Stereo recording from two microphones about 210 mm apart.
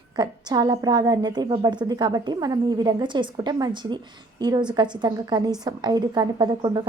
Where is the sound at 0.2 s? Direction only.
20° right (ahead or behind).